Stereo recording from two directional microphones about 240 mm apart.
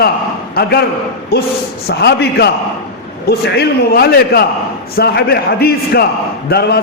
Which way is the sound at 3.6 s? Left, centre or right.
Left.